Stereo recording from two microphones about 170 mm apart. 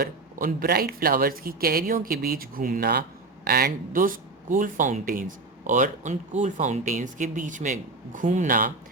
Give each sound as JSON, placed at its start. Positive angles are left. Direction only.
{"t": 0.0, "sound": "speech", "side_deg": -60}